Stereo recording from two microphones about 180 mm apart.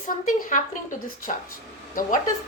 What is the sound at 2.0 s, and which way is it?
Speech, 50° left (ahead or behind).